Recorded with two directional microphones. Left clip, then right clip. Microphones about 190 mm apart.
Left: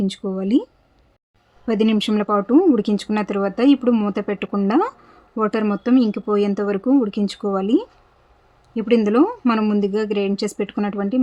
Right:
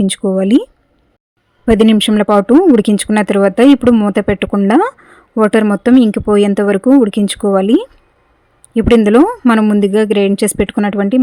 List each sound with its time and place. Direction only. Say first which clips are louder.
0.0 s speech: right 11 dB; 35° right (ahead or behind)